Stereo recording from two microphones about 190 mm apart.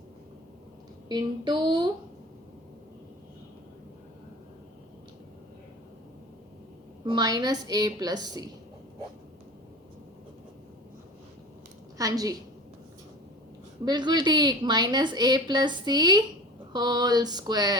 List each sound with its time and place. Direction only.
1.0 s a woman's voice: 20° right (ahead or behind)
7.1 s a woman's voice: 20° right (ahead or behind)
11.9 s a woman's voice: 20° right (ahead or behind)
13.8 s a woman's voice: 20° right (ahead or behind)